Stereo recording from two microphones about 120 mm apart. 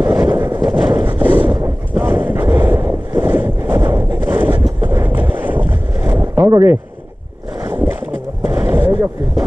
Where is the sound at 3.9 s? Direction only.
20° right (ahead or behind).